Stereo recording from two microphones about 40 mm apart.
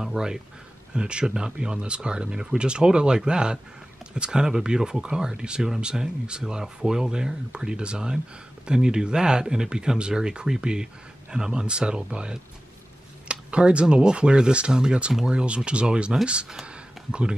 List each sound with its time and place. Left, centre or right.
0.0 s speech: centre
0.9 s speech: right
16.6 s a sound: right